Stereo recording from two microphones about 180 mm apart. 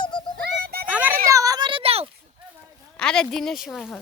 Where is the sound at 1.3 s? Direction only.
20° right (ahead or behind).